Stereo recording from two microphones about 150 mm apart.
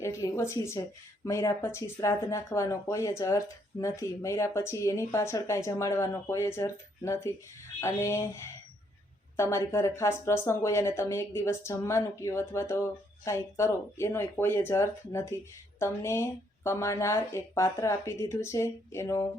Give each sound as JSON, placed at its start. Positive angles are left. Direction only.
{"t": 0.0, "sound": "speech", "side_deg": 20}
{"t": 9.3, "sound": "speech", "side_deg": 20}